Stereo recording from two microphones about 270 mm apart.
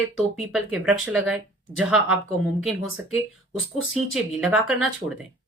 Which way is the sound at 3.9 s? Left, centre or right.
Centre.